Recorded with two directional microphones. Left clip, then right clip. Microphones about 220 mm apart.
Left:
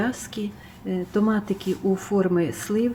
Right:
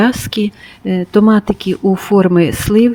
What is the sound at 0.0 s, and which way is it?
Speech, 45° right (ahead or behind).